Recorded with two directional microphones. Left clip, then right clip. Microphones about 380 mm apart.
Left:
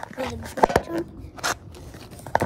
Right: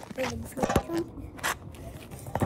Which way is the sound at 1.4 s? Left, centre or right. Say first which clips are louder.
Left 4 dB; left.